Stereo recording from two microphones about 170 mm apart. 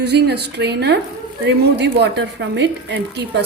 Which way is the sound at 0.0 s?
75° right (ahead or behind).